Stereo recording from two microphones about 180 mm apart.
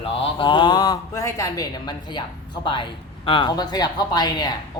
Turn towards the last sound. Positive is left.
turn(degrees=25)  # may be behind; listen again after turning